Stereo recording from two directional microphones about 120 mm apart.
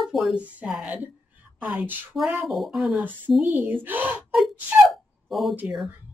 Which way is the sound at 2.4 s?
Centre (ahead or behind).